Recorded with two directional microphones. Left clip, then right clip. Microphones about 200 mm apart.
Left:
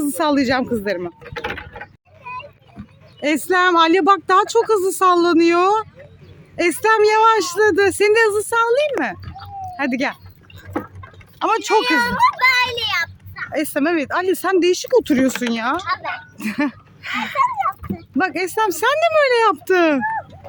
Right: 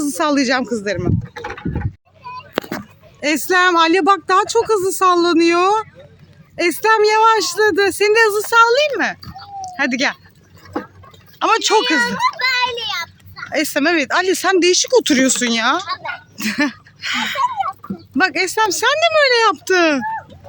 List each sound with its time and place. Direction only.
0.2 s speech: centre (ahead or behind)
1.2 s speech: 40° left (ahead or behind)
3.2 s speech: 5° left (ahead or behind)
9.4 s cat: centre (ahead or behind)
11.3 s speech: centre (ahead or behind)
11.9 s children playing: 60° left (ahead or behind)
13.3 s speech: centre (ahead or behind)